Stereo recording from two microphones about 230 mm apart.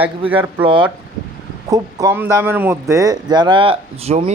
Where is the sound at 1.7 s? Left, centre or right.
Centre.